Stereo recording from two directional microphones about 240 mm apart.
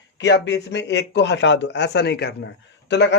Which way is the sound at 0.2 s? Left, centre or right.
Left.